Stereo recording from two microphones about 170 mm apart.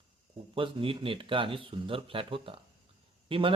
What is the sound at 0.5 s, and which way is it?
A man's voice, 30° right (ahead or behind).